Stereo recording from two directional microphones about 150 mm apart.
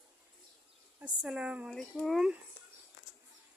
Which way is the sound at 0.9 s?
5° right (ahead or behind).